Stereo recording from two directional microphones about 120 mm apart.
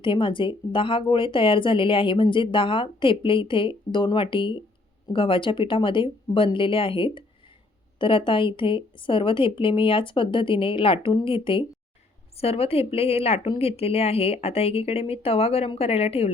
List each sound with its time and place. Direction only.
0.0 s speech: 45° left (ahead or behind)